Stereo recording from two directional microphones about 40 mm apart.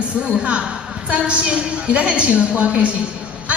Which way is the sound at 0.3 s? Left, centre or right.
Right.